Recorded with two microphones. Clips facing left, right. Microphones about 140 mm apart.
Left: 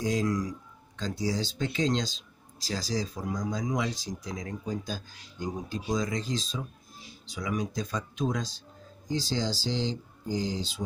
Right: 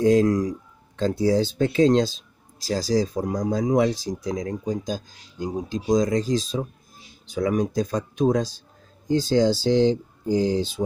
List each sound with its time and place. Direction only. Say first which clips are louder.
0.0 s speech: right 10 dB; 55° right (ahead or behind)